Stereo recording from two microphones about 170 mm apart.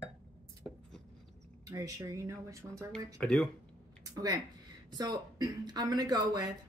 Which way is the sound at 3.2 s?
5° left (ahead or behind).